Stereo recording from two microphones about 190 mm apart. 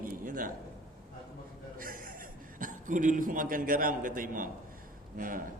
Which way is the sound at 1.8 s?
50° right (ahead or behind).